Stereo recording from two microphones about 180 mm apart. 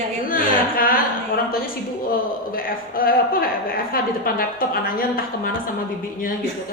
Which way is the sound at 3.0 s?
55° left (ahead or behind).